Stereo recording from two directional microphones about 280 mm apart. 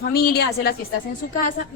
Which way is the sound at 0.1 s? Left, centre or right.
Left.